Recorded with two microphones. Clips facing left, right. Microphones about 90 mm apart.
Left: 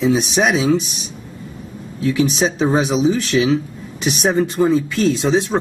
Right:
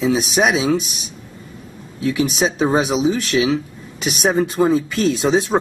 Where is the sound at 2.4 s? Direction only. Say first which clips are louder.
Even; 5° right (ahead or behind).